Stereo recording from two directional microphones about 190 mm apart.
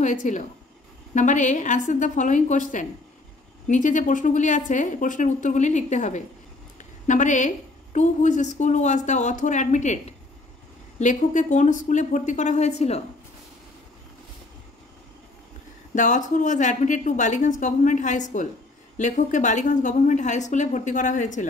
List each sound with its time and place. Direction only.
0.0 s a woman's voice: 40° left (ahead or behind)
15.9 s a woman's voice: 40° left (ahead or behind)